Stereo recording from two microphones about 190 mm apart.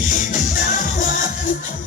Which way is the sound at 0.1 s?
45° left (ahead or behind).